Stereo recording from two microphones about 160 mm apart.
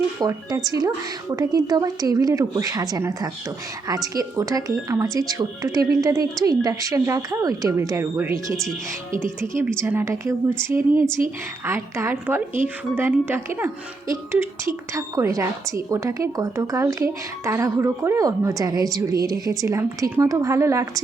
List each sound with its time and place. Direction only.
0.2 s a woman's voice: 20° right (ahead or behind)